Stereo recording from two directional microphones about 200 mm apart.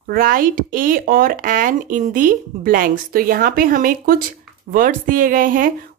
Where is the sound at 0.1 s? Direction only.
45° right (ahead or behind).